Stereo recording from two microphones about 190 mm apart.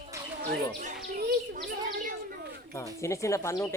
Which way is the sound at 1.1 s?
55° right (ahead or behind).